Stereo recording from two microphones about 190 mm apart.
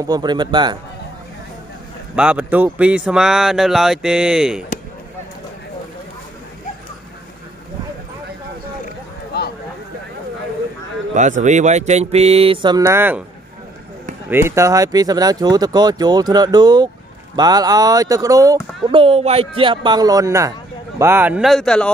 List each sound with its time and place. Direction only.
0.0 s speech: 20° right (ahead or behind)
2.1 s speech: 5° right (ahead or behind)
8.8 s clip-clop: 55° left (ahead or behind)
11.1 s speech: 40° right (ahead or behind); by 13.2 s 10° right (ahead or behind)
14.3 s speech: 15° right (ahead or behind); by 21.9 s 5° left (ahead or behind)